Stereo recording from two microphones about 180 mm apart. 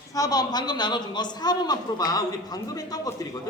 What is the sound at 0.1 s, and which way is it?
A man's voice, 20° left (ahead or behind).